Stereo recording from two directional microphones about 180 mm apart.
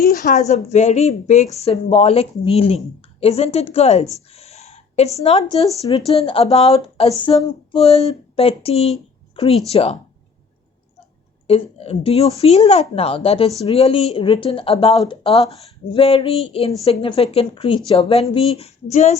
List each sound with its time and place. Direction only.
0.0 s speech: 50° left (ahead or behind); by 4.1 s 35° left (ahead or behind)
4.3 s a sound: 35° left (ahead or behind)
5.1 s speech: 35° left (ahead or behind)
11.4 s speech: 35° left (ahead or behind)